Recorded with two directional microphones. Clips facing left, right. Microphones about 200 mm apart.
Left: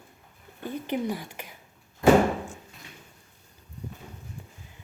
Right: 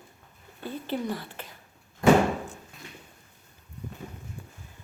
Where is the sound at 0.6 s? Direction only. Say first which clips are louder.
Left 2 dB; 15° left (ahead or behind).